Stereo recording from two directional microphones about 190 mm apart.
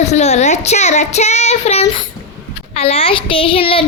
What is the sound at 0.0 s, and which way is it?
Speech, 35° left (ahead or behind).